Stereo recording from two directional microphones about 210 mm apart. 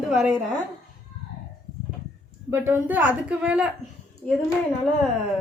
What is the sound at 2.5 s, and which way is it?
Speech, 10° right (ahead or behind).